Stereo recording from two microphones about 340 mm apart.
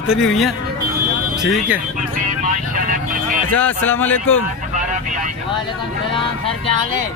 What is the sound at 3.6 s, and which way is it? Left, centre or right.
Speech, centre.